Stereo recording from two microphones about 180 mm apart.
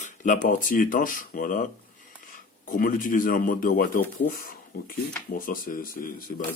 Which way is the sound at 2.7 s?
50° left (ahead or behind).